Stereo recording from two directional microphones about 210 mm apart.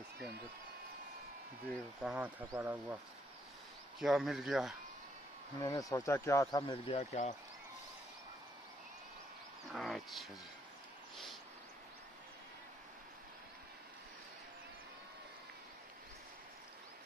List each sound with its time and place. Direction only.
1.7 s speech: 5° right (ahead or behind)
4.0 s speech: centre (ahead or behind)
5.6 s speech: 15° left (ahead or behind)
7.0 s speech: 35° left (ahead or behind)
9.7 s speech: centre (ahead or behind)